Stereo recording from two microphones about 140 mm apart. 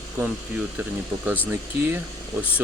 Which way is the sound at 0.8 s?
10° right (ahead or behind).